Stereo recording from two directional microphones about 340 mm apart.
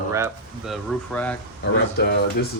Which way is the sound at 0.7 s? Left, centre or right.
Centre.